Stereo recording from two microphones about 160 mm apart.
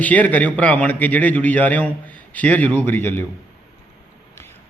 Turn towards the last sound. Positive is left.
turn(degrees=10)  # may be behind; listen again after turning